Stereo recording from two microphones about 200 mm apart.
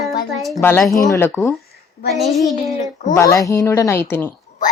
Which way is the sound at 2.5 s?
35° left (ahead or behind).